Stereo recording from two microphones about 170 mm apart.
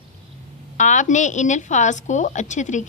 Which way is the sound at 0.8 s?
45° left (ahead or behind).